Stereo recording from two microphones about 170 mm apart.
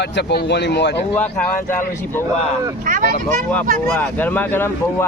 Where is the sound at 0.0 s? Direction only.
85° left.